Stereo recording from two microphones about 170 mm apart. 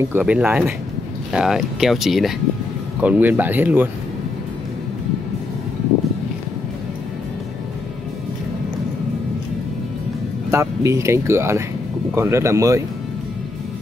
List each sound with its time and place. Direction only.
0.1 s speech: 5° right (ahead or behind)
10.5 s speech: 15° right (ahead or behind)